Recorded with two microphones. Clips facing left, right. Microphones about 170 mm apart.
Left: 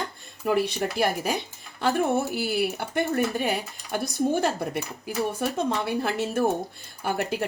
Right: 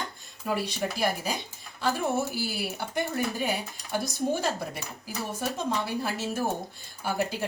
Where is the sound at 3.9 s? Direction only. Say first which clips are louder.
Left 4 dB; 60° left (ahead or behind).